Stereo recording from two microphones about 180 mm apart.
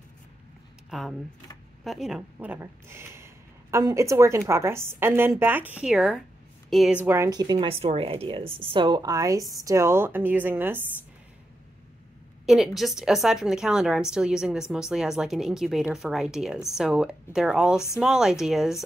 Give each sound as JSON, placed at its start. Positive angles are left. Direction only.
{"t": 0.8, "sound": "a woman's voice", "side_deg": 0}
{"t": 7.1, "sound": "a woman's voice", "side_deg": -20}
{"t": 12.4, "sound": "speech", "side_deg": 0}